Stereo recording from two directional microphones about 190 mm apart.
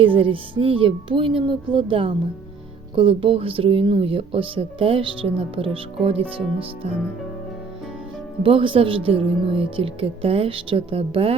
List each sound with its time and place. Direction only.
0.0 s speech: 30° right (ahead or behind)
8.4 s speech: 30° right (ahead or behind)